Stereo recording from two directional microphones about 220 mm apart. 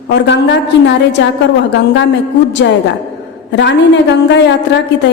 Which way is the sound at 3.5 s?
55° left (ahead or behind).